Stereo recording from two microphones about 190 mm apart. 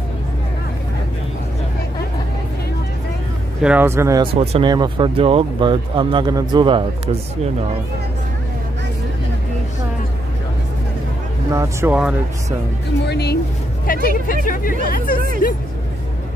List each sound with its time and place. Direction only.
3.6 s speech: 10° right (ahead or behind)
4.2 s speech: 30° right (ahead or behind)
11.5 s speech: 15° right (ahead or behind)
13.0 s speech: 60° left (ahead or behind)
13.8 s speech: 50° left (ahead or behind)